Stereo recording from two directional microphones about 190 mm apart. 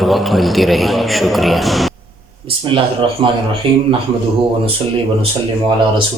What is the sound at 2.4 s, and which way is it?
Speech, 25° right (ahead or behind).